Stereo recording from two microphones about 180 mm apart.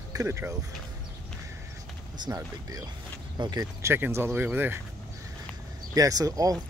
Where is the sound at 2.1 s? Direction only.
20° right (ahead or behind).